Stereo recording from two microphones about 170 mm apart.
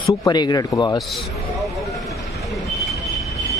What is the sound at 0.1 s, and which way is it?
Speech, 25° left (ahead or behind).